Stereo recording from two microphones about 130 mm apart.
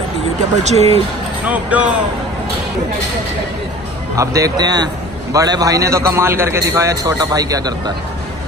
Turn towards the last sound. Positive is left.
turn(degrees=-30)  # may be behind; listen again after turning